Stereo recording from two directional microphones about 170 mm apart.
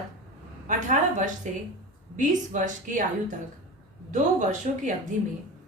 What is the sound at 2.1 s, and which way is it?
A woman's voice, 45° right (ahead or behind).